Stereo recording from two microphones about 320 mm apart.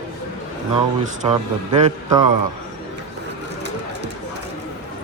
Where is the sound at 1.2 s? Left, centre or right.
Centre.